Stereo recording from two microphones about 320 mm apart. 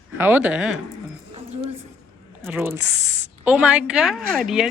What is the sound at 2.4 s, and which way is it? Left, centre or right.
A woman's voice, centre.